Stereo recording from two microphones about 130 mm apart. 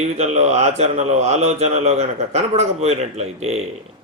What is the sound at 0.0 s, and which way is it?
A man's voice, 60° right (ahead or behind).